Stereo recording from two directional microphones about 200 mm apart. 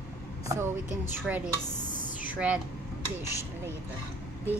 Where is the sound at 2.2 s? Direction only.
5° right (ahead or behind).